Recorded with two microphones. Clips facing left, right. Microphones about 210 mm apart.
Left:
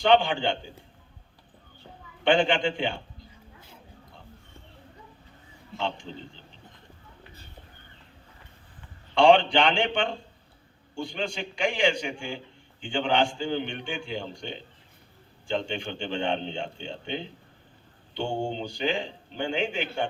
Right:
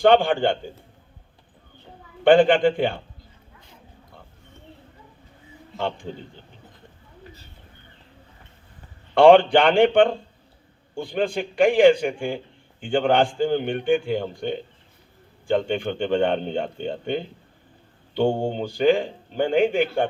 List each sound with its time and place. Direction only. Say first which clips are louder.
0.0 s a man's voice: right 5 dB; 50° right (ahead or behind)
2.2 s a man's voice: right 8 dB; 55° right (ahead or behind)
5.7 s a man's voice: right 4 dB; 55° right (ahead or behind)
9.1 s a man's voice: right 6 dB; 55° right (ahead or behind)